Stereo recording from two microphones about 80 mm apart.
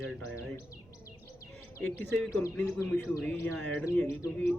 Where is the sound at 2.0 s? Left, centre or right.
Left.